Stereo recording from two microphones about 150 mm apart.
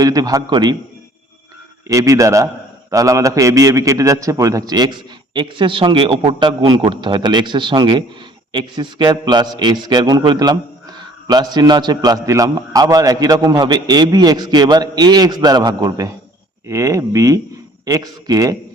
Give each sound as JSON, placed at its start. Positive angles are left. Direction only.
{"t": 0.0, "sound": "a man's voice", "side_deg": -25}
{"t": 1.9, "sound": "a man's voice", "side_deg": -20}